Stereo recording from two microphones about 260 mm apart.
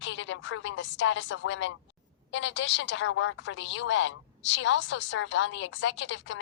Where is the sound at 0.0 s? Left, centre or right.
Left.